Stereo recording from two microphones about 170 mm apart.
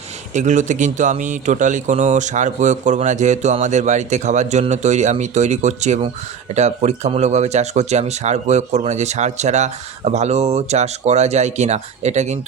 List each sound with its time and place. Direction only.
0.3 s speech: 45° right (ahead or behind)